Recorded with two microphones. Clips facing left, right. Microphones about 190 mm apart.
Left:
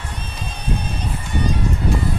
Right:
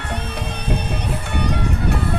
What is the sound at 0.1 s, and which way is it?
Music, 65° right (ahead or behind).